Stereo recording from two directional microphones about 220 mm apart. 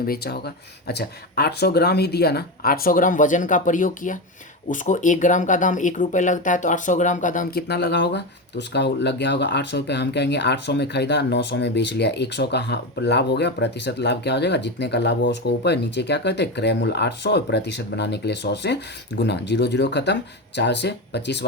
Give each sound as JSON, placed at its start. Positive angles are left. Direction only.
{"t": 0.0, "sound": "speech", "side_deg": 45}